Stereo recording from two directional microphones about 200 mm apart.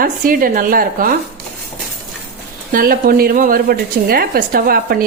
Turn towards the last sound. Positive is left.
turn(degrees=-50)  # may be behind; listen again after turning